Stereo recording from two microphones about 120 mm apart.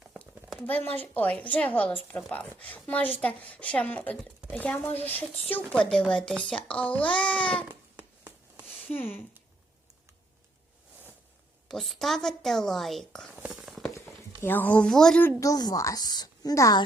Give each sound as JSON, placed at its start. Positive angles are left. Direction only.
{"t": 0.0, "sound": "a child's voice", "side_deg": 5}
{"t": 7.7, "sound": "a sound", "side_deg": -15}
{"t": 8.6, "sound": "a sound", "side_deg": 15}
{"t": 11.7, "sound": "speech", "side_deg": 0}
{"t": 13.3, "sound": "whispering", "side_deg": -10}
{"t": 14.4, "sound": "a child's voice", "side_deg": 15}
{"t": 15.2, "sound": "a woman's voice", "side_deg": 20}